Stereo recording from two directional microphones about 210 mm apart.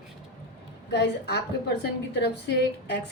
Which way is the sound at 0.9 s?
50° left (ahead or behind).